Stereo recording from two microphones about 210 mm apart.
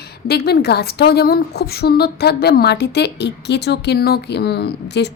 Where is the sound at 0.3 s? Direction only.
50° left (ahead or behind).